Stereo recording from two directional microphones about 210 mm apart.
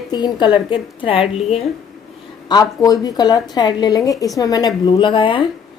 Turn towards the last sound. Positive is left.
turn(degrees=25)  # may be behind; listen again after turning